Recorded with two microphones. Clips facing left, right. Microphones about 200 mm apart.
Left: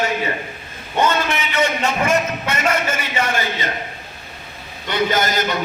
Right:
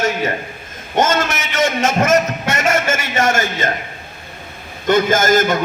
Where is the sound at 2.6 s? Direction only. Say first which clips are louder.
Right 3 dB; 80° right.